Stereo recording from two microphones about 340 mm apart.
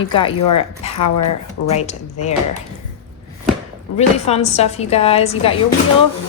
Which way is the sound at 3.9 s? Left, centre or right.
Centre.